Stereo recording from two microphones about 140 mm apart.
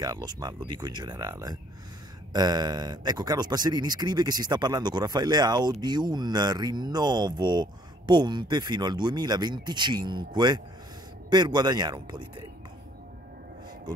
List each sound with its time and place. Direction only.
0.0 s speech: 30° right (ahead or behind)